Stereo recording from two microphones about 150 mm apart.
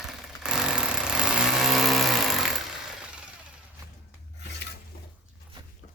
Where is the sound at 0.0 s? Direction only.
5° right (ahead or behind).